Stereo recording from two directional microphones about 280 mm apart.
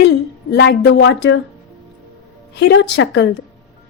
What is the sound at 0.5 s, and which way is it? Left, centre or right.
Speech, left.